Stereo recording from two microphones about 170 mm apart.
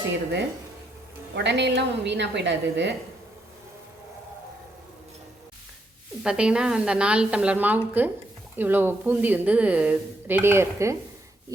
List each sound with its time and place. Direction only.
1.4 s a woman's voice: 90° right
6.2 s a woman's voice: 5° right (ahead or behind)